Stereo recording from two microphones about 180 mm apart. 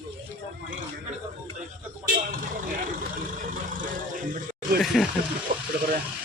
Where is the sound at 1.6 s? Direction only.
50° right (ahead or behind).